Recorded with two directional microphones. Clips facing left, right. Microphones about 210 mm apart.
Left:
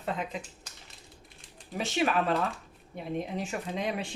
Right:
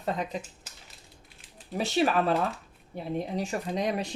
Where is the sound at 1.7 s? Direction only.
35° right (ahead or behind).